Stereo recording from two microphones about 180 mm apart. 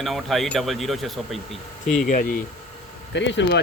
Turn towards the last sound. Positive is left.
turn(degrees=80)